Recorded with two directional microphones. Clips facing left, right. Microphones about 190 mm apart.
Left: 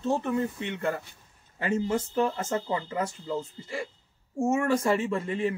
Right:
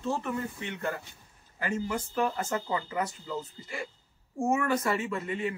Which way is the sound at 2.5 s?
25° left (ahead or behind).